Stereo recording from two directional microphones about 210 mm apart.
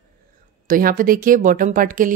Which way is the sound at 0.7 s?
40° right (ahead or behind).